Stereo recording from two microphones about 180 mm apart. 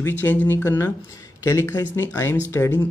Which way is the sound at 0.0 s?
10° left (ahead or behind).